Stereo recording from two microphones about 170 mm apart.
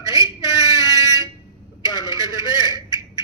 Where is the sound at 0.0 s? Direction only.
20° right (ahead or behind).